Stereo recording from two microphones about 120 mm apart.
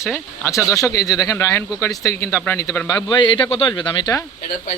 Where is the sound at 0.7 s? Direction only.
30° left (ahead or behind).